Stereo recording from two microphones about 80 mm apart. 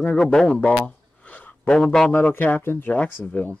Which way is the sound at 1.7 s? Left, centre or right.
Centre.